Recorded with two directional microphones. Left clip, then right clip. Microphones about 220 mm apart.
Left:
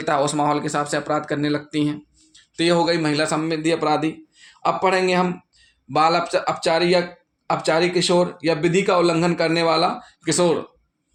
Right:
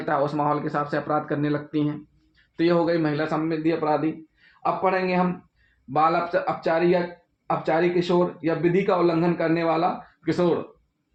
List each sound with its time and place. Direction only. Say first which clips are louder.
0.0 s speech: left 4 dB; 45° left (ahead or behind)